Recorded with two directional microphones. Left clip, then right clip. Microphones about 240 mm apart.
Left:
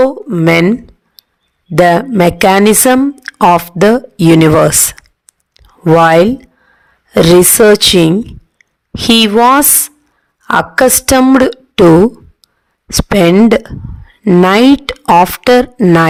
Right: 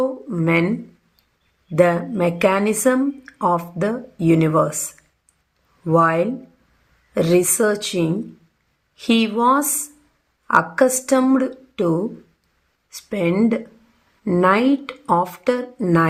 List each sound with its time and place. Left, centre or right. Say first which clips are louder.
0.3 s speech: left 10 dB; left
1.7 s speech: left 9 dB; left
5.8 s speech: left 11 dB; left
12.9 s speech: left 13 dB; left